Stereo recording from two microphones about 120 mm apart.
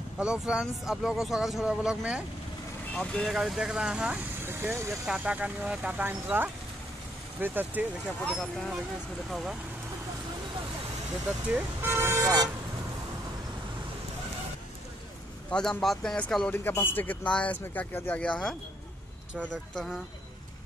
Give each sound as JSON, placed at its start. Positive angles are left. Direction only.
{"t": 0.2, "sound": "speech", "side_deg": -5}
{"t": 2.9, "sound": "speech", "side_deg": 5}
{"t": 8.4, "sound": "speech", "side_deg": 5}
{"t": 11.5, "sound": "speech", "side_deg": -20}
{"t": 15.5, "sound": "speech", "side_deg": 5}